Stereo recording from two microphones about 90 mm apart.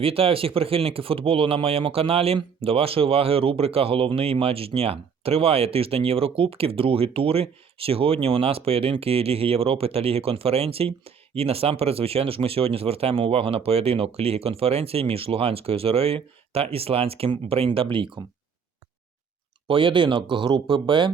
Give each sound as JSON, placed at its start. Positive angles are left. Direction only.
{"t": 0.0, "sound": "speech", "side_deg": -90}
{"t": 19.6, "sound": "speech", "side_deg": -75}